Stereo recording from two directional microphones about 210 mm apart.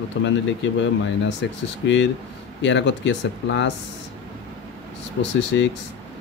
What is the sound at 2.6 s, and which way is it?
Speech, 60° left (ahead or behind).